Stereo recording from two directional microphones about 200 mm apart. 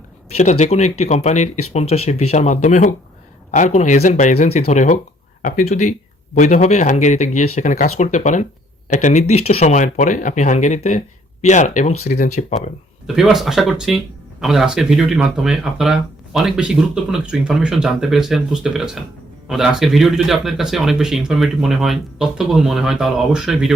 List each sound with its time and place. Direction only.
0.3 s speech: 35° left (ahead or behind)
13.1 s speech: centre (ahead or behind)